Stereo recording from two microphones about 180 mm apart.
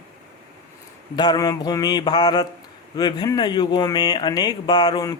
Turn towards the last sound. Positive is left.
turn(degrees=20)  # may be behind; listen again after turning